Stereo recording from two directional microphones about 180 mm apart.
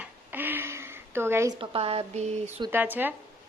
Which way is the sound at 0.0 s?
10° right (ahead or behind).